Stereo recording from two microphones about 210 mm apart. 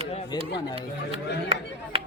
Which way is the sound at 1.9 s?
25° right (ahead or behind).